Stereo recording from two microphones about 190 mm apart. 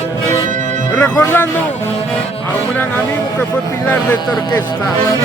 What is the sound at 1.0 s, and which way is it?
Music, 10° left (ahead or behind).